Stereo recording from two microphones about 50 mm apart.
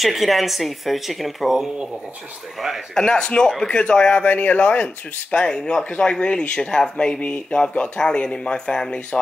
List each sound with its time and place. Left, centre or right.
0.0 s speech: centre
2.9 s speech: centre
4.2 s speech: left
5.3 s speech: centre